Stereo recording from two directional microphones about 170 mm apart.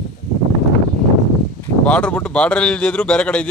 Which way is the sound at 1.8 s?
10° left (ahead or behind).